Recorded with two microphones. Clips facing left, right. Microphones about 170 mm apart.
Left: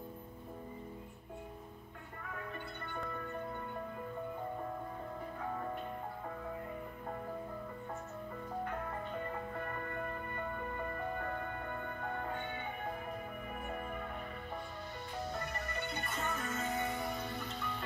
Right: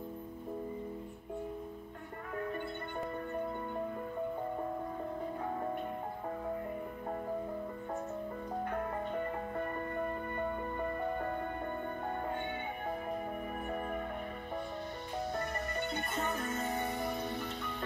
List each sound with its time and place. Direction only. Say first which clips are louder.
16.0 s music: right 3 dB; 20° right (ahead or behind)